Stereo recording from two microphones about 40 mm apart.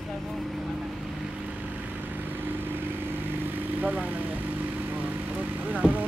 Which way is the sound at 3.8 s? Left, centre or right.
Right.